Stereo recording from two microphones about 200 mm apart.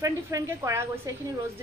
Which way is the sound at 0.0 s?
15° right (ahead or behind).